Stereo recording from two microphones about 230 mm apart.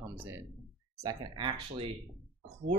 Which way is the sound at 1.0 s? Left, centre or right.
Right.